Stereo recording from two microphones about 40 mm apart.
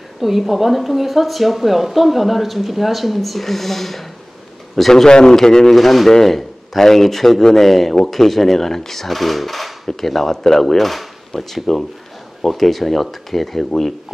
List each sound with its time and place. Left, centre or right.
0.2 s speech: centre
5.0 s speech: centre
5.8 s speech: centre